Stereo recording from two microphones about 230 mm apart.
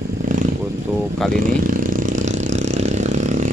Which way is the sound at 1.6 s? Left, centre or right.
Right.